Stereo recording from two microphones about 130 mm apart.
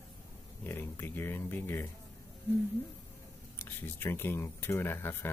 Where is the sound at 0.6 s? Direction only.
15° left (ahead or behind).